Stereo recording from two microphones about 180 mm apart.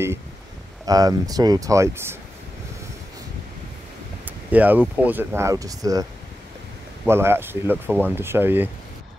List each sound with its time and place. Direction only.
0.8 s speech: 20° right (ahead or behind)
4.5 s speech: 10° right (ahead or behind)
7.1 s speech: 15° right (ahead or behind)